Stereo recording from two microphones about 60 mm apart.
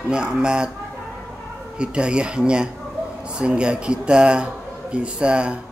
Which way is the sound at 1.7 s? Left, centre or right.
Centre.